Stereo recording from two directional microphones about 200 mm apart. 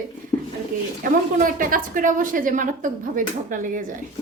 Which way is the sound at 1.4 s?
45° right (ahead or behind).